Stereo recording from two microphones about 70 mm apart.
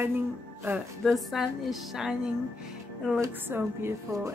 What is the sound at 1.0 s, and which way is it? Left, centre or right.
A woman's voice, centre.